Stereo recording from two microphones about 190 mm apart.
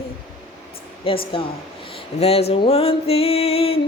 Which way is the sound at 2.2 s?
30° left (ahead or behind).